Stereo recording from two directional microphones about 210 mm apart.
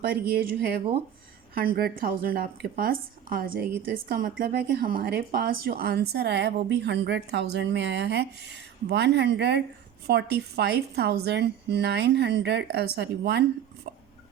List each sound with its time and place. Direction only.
0.1 s a woman's voice: 45° right (ahead or behind)